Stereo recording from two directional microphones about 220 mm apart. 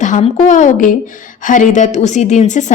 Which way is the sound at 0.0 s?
35° left (ahead or behind).